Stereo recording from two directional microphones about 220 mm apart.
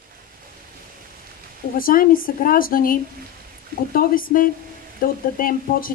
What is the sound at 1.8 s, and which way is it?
Speech, 40° left (ahead or behind).